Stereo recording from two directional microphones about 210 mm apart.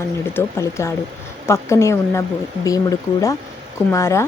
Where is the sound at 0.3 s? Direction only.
15° left (ahead or behind).